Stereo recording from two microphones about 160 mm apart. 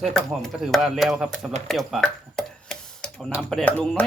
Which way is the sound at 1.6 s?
Centre (ahead or behind).